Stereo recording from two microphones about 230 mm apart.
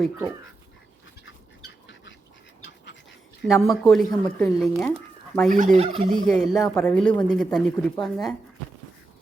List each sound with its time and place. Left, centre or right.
3.4 s speech: centre
4.9 s a sound: centre
5.5 s fowl: right
6.1 s speech: centre